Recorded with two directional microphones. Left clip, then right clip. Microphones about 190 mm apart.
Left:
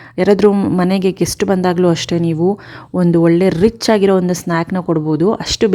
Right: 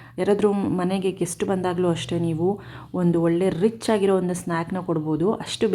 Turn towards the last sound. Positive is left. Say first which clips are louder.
# left 9 dB
turn(degrees=35)  # may be behind; listen again after turning